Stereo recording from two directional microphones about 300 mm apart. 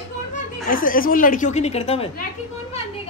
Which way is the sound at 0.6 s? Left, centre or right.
Left.